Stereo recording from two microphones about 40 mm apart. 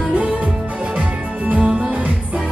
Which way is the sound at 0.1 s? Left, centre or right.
Right.